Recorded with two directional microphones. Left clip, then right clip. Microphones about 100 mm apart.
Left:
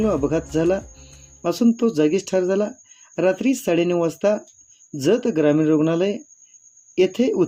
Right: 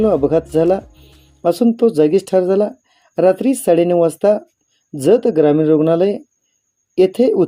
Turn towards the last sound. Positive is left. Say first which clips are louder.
# right 6 dB
turn(degrees=-20)  # may be behind; listen again after turning